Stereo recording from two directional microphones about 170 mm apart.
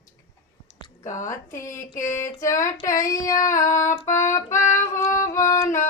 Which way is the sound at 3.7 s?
15° left (ahead or behind).